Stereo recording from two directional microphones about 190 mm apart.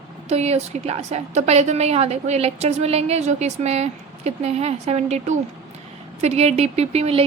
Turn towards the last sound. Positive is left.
turn(degrees=-30)  # may be behind; listen again after turning